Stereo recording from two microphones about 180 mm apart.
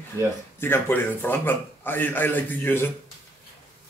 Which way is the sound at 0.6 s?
10° left (ahead or behind).